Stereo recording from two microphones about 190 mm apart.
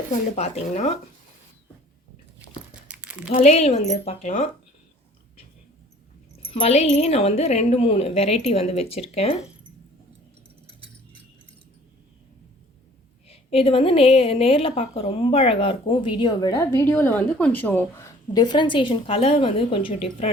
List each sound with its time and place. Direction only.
0.1 s speech: 35° left (ahead or behind)
2.8 s crumpling: 5° right (ahead or behind)
3.3 s speech: 35° left (ahead or behind)
6.4 s speech: 30° left (ahead or behind)
13.2 s a woman's voice: 30° left (ahead or behind)